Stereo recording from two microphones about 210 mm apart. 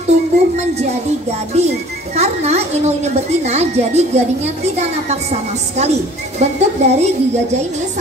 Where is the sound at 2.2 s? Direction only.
30° right (ahead or behind).